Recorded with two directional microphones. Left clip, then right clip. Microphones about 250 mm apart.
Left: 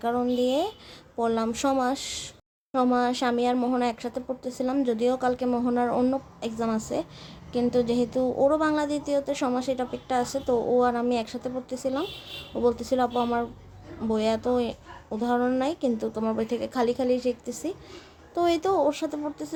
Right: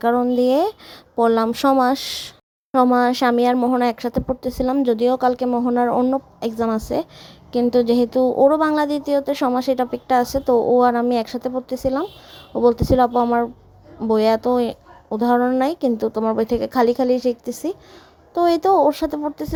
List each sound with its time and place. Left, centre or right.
0.0 s a woman's voice: right